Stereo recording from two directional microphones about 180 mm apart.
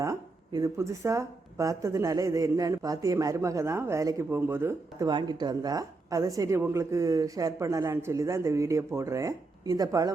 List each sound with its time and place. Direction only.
0.0 s speech: 15° right (ahead or behind)